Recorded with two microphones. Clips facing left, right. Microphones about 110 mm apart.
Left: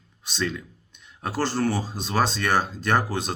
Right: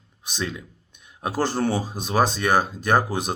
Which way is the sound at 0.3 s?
15° right (ahead or behind).